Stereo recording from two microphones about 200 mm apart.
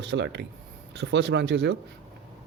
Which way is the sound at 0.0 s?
60° right (ahead or behind).